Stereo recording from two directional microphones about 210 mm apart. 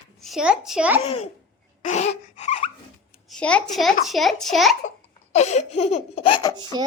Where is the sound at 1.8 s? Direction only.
35° left (ahead or behind).